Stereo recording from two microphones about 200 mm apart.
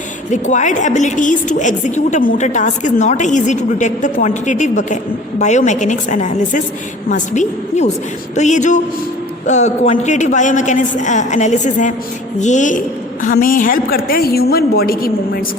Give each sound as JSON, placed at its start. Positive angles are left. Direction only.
{"t": 0.3, "sound": "a woman's voice", "side_deg": 40}